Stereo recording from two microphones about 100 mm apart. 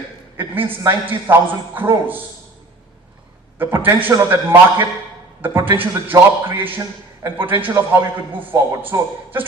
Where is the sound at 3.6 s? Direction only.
25° right (ahead or behind).